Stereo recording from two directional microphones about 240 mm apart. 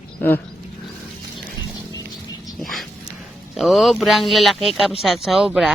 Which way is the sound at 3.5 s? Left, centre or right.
Centre.